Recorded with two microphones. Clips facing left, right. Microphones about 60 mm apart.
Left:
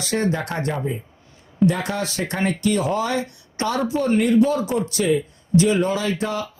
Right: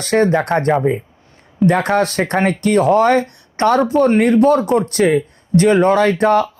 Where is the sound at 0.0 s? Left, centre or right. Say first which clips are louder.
Right 8 dB; right.